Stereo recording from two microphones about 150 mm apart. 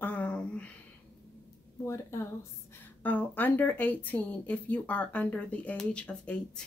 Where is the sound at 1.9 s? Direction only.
20° left (ahead or behind).